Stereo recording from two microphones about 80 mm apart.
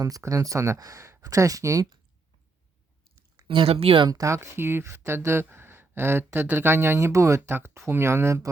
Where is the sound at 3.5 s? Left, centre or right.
Right.